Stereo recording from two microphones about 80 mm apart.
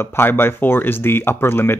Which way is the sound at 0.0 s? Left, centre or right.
Left.